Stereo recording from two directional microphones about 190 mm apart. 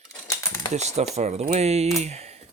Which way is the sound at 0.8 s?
35° right (ahead or behind).